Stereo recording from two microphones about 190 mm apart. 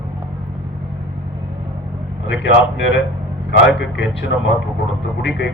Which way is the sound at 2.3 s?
70° left (ahead or behind).